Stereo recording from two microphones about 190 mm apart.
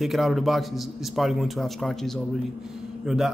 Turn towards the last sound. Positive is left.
turn(degrees=0)  # may be behind; listen again after turning